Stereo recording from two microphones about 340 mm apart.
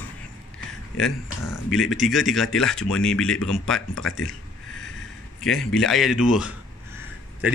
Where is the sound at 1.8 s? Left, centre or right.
Centre.